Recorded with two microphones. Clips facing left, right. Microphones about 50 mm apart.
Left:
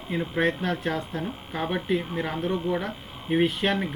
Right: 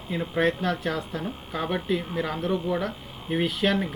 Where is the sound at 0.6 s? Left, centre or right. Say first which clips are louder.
Even; centre.